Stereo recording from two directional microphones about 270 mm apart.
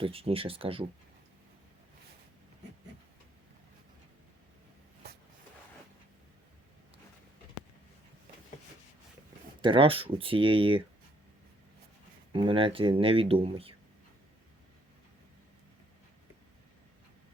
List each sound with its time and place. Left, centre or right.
0.0 s speech: right
9.6 s speech: centre
12.3 s speech: centre